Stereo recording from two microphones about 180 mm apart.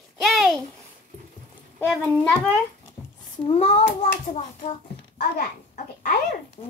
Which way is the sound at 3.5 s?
35° left (ahead or behind).